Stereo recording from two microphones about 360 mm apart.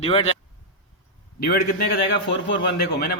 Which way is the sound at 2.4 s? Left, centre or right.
Left.